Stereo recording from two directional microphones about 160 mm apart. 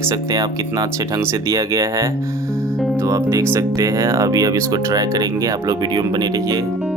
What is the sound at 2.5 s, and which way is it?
Music, 5° left (ahead or behind).